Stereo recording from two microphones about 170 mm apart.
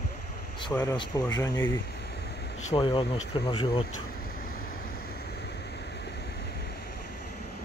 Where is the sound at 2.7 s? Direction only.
30° left (ahead or behind).